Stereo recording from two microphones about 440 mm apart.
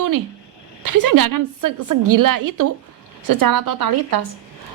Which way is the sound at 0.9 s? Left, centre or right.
Right.